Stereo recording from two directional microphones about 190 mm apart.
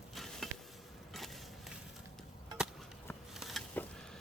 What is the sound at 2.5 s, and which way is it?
Chop, 5° right (ahead or behind).